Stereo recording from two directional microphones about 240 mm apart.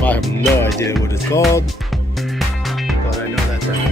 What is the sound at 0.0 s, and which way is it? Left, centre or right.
Speech, centre.